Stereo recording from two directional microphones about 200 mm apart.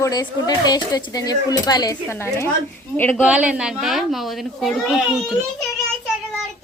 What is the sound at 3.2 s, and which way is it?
A child's voice, 5° right (ahead or behind).